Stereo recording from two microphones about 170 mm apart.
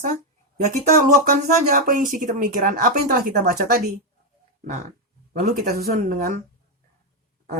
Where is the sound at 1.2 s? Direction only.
50° right (ahead or behind).